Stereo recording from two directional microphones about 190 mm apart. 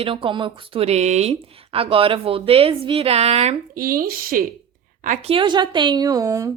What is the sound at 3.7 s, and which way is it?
Speech, 50° right (ahead or behind).